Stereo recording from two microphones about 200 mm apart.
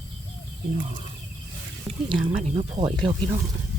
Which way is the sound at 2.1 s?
30° right (ahead or behind).